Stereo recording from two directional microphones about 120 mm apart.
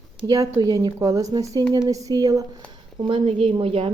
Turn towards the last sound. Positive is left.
turn(degrees=-50)  # may be behind; listen again after turning